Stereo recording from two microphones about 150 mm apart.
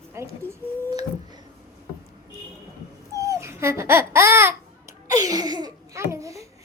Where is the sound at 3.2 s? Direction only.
20° right (ahead or behind).